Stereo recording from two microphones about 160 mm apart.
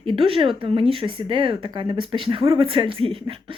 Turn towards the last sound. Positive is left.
turn(degrees=-35)  # may be behind; listen again after turning